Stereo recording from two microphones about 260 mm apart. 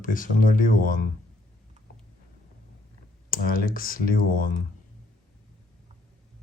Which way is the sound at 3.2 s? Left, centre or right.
Left.